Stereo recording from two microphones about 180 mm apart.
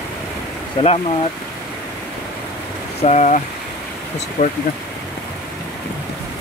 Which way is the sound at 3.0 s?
40° left (ahead or behind).